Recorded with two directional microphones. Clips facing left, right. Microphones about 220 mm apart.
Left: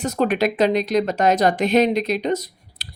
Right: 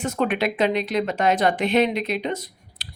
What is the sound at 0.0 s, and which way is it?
Speech, 40° left (ahead or behind).